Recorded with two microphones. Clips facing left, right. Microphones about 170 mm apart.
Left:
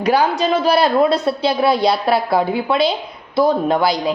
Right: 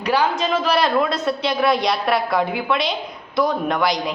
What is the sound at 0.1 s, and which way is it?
A woman's voice, 35° left (ahead or behind).